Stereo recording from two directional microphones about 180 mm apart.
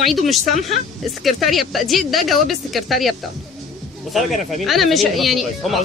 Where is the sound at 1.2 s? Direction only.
Centre (ahead or behind).